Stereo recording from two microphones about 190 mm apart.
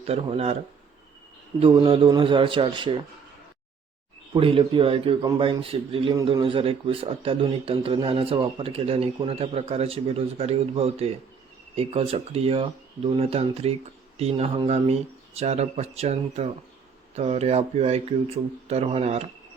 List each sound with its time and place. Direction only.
0.0 s speech: 30° right (ahead or behind)
1.5 s a man's voice: 30° right (ahead or behind)
4.4 s a man's voice: 30° right (ahead or behind)